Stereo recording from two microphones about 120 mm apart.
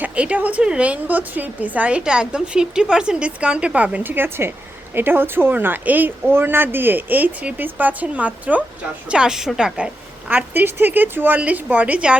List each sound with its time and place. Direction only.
0.0 s a woman's voice: 10° right (ahead or behind)